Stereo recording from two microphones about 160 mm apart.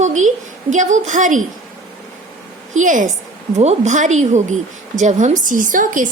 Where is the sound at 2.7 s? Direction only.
55° right (ahead or behind).